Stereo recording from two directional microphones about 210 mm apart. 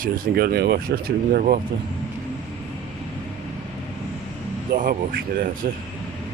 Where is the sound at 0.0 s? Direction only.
45° right (ahead or behind).